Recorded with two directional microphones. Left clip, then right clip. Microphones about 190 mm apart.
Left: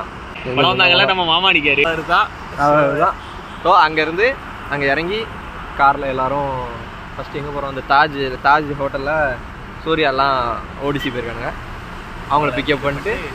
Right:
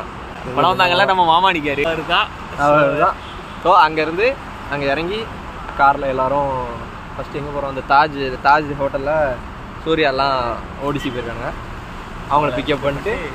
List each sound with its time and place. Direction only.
0.6 s speech: 5° right (ahead or behind)
2.6 s speech: 25° left (ahead or behind)
3.6 s speech: 10° left (ahead or behind)
12.3 s speech: 20° left (ahead or behind)